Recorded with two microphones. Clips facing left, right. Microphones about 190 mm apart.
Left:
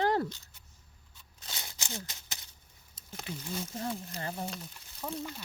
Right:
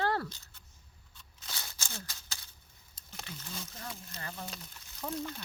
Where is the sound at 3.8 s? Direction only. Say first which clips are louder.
Left 8 dB; 30° left (ahead or behind).